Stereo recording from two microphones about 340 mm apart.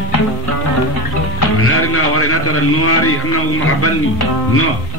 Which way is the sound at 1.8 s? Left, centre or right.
Left.